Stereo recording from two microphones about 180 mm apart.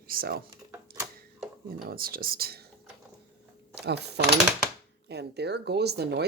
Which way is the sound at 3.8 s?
65° right (ahead or behind).